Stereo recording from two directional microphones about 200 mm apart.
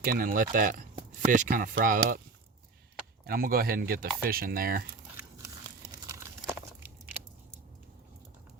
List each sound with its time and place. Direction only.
0.0 s speech: 45° right (ahead or behind)
3.2 s speech: 45° right (ahead or behind)